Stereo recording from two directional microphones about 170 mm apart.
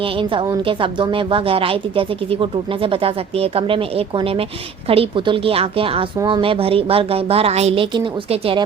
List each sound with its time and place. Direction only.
0.0 s a woman's voice: 30° right (ahead or behind)